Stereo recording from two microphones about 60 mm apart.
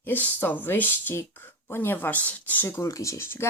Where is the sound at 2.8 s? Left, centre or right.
Left.